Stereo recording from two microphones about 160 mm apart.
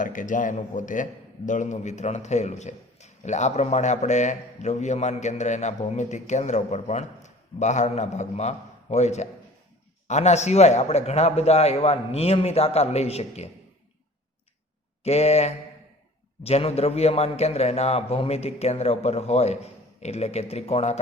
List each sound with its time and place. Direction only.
0.0 s a man's voice: 55° left (ahead or behind); by 13.5 s 40° left (ahead or behind)
15.0 s a man's voice: 40° left (ahead or behind)